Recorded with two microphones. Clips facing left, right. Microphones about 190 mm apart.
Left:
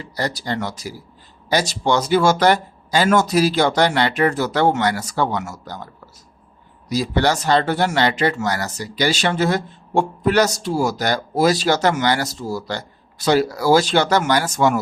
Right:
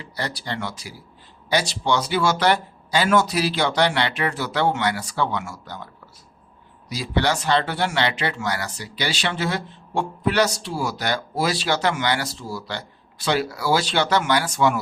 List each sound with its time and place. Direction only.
0.0 s speech: 40° left (ahead or behind)